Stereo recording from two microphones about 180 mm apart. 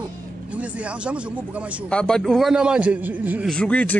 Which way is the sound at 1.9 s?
5° left (ahead or behind).